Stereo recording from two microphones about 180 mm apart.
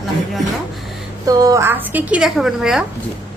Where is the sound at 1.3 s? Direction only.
20° right (ahead or behind); by 2.8 s centre (ahead or behind).